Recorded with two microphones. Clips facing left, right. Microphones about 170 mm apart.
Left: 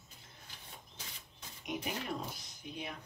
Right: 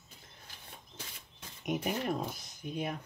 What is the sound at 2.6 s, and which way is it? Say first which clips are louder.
Speech: right 8 dB; 50° right (ahead or behind).